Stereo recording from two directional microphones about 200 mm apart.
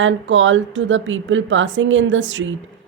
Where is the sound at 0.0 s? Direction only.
70° right (ahead or behind).